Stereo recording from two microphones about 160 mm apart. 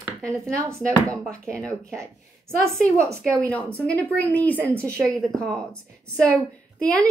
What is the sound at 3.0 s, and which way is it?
Speech, 15° right (ahead or behind).